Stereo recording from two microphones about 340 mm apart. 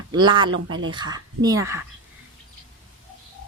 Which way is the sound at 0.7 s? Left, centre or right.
Right.